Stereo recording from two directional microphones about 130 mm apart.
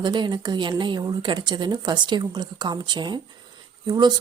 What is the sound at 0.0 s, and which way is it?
A woman's voice, 35° right (ahead or behind).